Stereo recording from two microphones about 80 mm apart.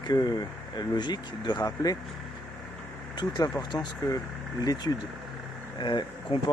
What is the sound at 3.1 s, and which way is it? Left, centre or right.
Speech, left.